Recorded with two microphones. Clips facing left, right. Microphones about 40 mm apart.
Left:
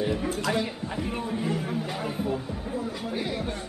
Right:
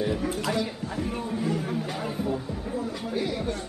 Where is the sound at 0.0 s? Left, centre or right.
Centre.